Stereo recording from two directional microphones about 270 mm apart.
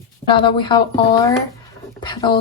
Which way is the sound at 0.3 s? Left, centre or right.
Centre.